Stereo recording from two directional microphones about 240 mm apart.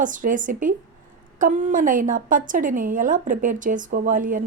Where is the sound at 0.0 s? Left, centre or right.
Right.